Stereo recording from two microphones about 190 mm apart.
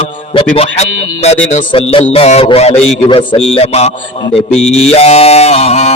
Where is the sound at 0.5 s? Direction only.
35° left (ahead or behind).